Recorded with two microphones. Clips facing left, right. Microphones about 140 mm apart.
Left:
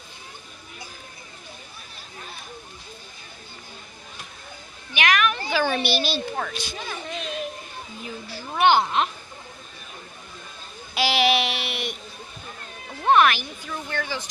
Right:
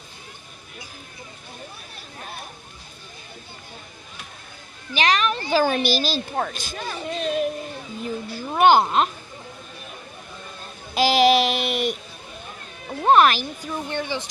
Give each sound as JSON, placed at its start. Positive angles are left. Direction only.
{"t": 4.9, "sound": "speech", "side_deg": -30}
{"t": 7.2, "sound": "a sound", "side_deg": -45}
{"t": 8.0, "sound": "speech", "side_deg": -50}
{"t": 10.9, "sound": "child singing", "side_deg": -40}
{"t": 13.0, "sound": "speech", "side_deg": -35}